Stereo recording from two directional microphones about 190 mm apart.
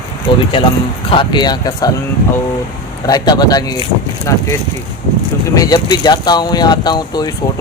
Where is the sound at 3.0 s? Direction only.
20° left (ahead or behind).